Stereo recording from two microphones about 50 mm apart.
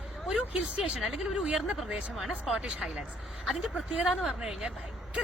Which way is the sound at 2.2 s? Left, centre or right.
Centre.